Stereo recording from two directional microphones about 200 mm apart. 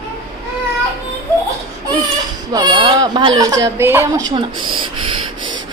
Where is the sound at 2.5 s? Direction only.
20° right (ahead or behind).